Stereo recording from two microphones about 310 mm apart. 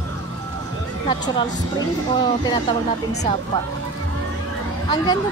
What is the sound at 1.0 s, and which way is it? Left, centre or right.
Speech, centre.